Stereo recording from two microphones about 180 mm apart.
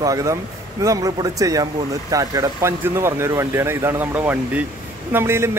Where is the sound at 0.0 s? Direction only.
20° right (ahead or behind).